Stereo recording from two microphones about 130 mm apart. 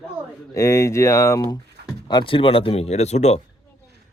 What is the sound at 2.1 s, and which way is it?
Speech, 40° left (ahead or behind).